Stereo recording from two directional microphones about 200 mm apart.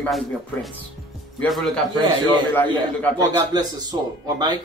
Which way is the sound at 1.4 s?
Centre (ahead or behind).